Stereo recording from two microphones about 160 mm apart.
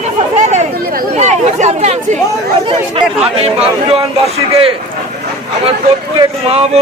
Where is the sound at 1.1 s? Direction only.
45° right (ahead or behind).